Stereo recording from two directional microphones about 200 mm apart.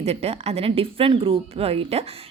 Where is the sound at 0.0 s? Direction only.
30° right (ahead or behind).